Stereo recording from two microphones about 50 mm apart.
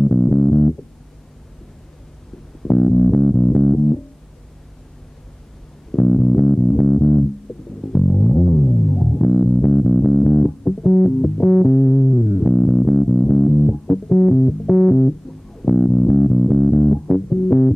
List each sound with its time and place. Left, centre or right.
0.0 s music: centre
2.6 s music: centre
5.9 s music: centre